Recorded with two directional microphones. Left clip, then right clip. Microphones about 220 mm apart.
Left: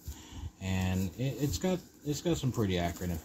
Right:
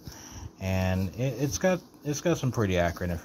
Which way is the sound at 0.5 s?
20° right (ahead or behind).